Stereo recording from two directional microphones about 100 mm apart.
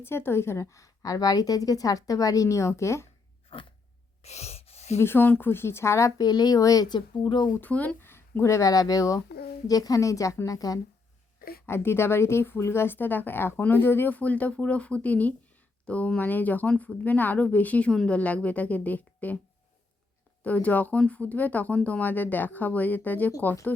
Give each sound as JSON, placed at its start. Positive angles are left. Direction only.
{"t": 0.0, "sound": "a woman's voice", "side_deg": 25}
{"t": 3.5, "sound": "a sound", "side_deg": 65}
{"t": 4.2, "sound": "a sound", "side_deg": 90}
{"t": 4.9, "sound": "a woman's voice", "side_deg": 20}
{"t": 7.5, "sound": "a woman's voice", "side_deg": 15}
{"t": 11.6, "sound": "speech", "side_deg": 25}
{"t": 20.4, "sound": "speech", "side_deg": 15}